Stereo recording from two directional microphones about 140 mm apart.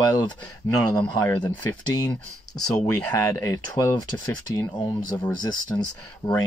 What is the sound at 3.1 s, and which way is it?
Speech, 20° left (ahead or behind).